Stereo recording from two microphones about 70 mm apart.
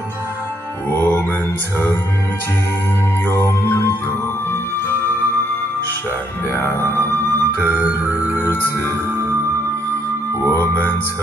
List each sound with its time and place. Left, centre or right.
0.9 s mantra: left
3.3 s music: left
6.5 s music: left